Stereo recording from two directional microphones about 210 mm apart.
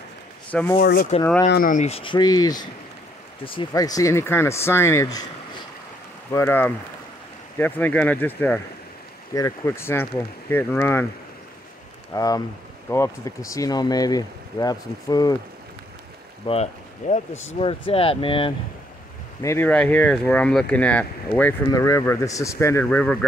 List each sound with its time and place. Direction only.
0.5 s speech: 5° left (ahead or behind)
0.7 s speech: 45° left (ahead or behind); by 5.2 s 15° left (ahead or behind)
6.3 s speech: 10° left (ahead or behind)
12.1 s speech: 15° left (ahead or behind)
16.5 s speech: 25° left (ahead or behind)
17.0 s speech: 35° left (ahead or behind)
19.4 s speech: 10° left (ahead or behind)